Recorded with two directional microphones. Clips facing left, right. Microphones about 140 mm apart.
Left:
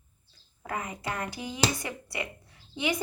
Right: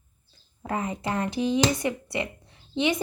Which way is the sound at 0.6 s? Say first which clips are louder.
Right 5 dB; 25° right (ahead or behind).